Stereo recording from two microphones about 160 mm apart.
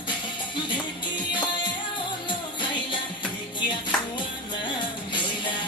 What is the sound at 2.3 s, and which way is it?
Music, 30° left (ahead or behind).